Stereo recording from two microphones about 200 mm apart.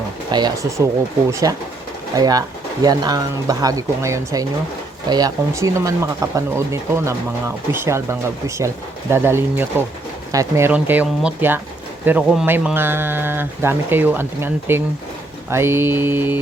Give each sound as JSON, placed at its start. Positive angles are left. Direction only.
{"t": 0.3, "sound": "speech", "side_deg": -20}